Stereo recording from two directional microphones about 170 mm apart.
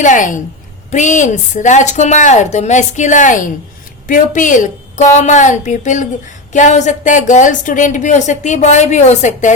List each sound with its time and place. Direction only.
0.0 s speech: 50° left (ahead or behind)